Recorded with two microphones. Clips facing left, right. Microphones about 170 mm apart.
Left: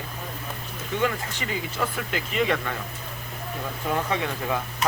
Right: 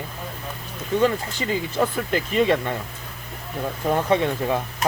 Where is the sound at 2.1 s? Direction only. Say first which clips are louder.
Right 4 dB; 35° right (ahead or behind).